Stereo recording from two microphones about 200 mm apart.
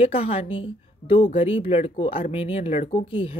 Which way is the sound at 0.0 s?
30° left (ahead or behind).